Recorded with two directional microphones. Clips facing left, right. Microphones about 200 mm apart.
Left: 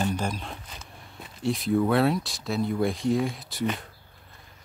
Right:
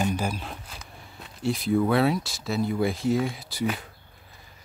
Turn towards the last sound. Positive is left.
turn(degrees=0)  # may be behind; listen again after turning